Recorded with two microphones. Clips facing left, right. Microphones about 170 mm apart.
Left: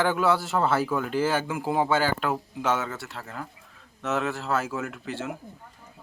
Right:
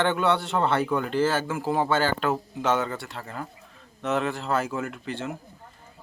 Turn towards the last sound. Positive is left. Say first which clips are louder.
# right 1 dB
turn(degrees=5)  # may be behind; listen again after turning